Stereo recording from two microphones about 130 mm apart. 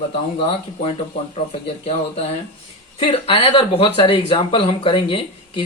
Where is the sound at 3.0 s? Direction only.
45° left (ahead or behind).